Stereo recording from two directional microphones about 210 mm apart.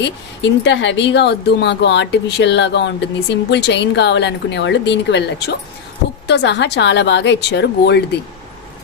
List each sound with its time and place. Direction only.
0.0 s speech: 60° left (ahead or behind)